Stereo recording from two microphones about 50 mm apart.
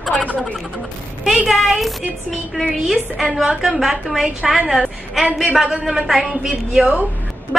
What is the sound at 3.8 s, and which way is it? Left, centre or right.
A woman's voice, centre.